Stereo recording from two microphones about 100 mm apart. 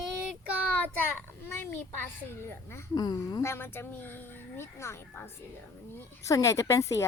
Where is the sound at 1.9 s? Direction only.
25° left (ahead or behind).